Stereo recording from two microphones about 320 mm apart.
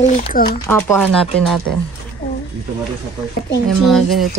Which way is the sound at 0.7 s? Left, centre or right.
Centre.